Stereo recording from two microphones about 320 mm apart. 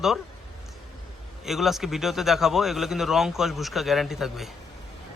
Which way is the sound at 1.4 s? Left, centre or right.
Centre.